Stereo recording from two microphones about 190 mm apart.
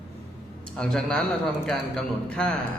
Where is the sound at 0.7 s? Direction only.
5° left (ahead or behind).